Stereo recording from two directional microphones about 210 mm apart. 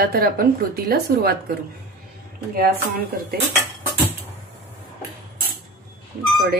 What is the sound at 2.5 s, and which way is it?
Speech, 45° right (ahead or behind).